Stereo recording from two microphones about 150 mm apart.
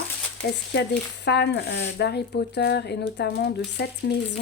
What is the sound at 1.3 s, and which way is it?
A woman's voice, 90° left.